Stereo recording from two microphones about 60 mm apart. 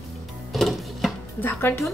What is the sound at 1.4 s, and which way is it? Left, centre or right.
Speech, left.